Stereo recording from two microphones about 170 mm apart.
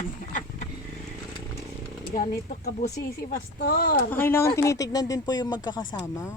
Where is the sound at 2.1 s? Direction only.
50° left (ahead or behind).